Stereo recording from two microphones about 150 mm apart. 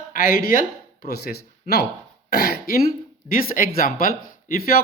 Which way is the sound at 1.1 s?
90° left.